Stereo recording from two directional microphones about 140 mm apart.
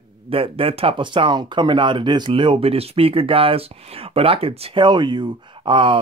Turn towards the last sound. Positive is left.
turn(degrees=-35)  # may be behind; listen again after turning